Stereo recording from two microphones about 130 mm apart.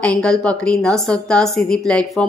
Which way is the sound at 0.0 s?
5° left (ahead or behind).